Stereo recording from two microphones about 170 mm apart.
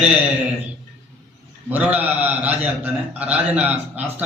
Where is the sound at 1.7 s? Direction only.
10° right (ahead or behind).